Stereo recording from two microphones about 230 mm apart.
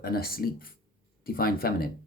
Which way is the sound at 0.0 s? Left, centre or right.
Left.